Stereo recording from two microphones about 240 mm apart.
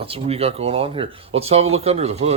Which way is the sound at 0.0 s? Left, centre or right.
Right.